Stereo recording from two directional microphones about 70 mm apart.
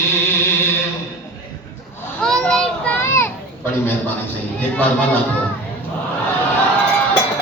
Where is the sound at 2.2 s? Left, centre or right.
Centre.